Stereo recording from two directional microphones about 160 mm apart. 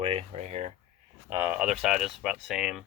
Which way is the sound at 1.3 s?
10° right (ahead or behind).